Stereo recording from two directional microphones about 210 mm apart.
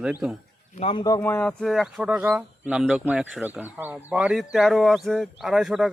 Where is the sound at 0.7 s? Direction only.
25° left (ahead or behind); by 5.9 s centre (ahead or behind).